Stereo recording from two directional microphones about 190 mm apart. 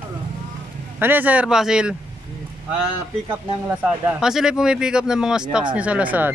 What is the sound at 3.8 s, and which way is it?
A man's voice, 5° right (ahead or behind).